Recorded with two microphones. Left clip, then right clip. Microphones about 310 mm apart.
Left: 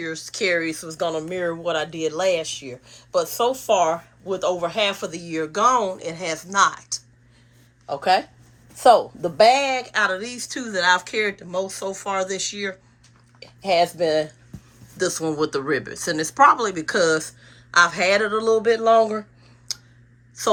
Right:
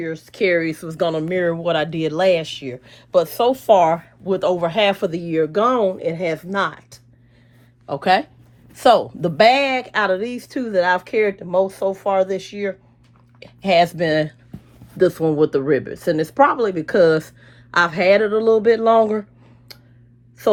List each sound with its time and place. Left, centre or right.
0.0 s speech: centre
7.9 s speech: right; by 12.7 s centre
13.4 s speech: right
14.9 s speech: centre
20.4 s speech: centre